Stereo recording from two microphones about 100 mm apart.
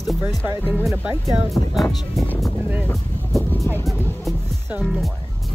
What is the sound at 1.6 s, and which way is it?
Speech, 40° left (ahead or behind).